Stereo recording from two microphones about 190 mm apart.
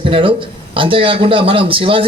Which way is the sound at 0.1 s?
30° right (ahead or behind).